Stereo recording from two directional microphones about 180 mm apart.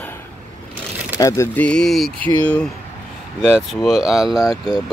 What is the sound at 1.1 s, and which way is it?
Speech, 15° left (ahead or behind).